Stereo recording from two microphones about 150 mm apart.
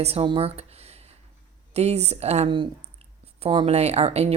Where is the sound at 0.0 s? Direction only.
40° right (ahead or behind).